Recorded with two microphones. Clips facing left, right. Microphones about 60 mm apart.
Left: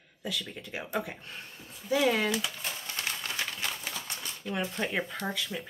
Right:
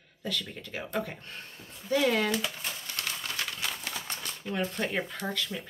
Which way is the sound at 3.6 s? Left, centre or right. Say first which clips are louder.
Even; centre.